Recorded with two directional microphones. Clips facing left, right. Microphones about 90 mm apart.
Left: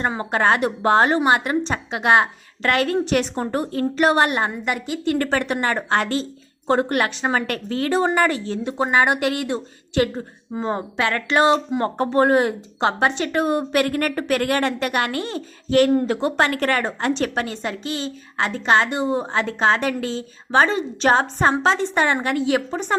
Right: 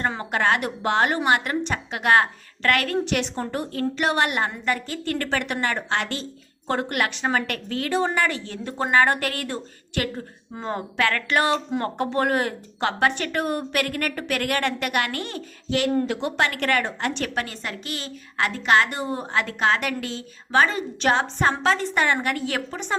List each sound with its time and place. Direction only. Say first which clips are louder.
0.2 s a woman's voice: left 6 dB; 30° left (ahead or behind)
4.6 s a woman's voice: left 3 dB; 15° left (ahead or behind)
5.1 s a woman's voice: left 3 dB; 30° left (ahead or behind)
8.6 s a woman's voice: left 1 dB; 15° left (ahead or behind)
15.7 s a woman's voice: left 6 dB; 40° left (ahead or behind)
21.6 s a woman's voice: left 3 dB; 25° left (ahead or behind)